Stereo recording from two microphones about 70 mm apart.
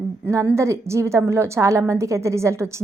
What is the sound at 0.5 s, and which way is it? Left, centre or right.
A woman's voice, right.